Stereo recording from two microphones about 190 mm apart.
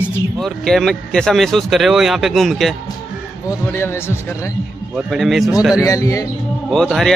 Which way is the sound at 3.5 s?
15° left (ahead or behind).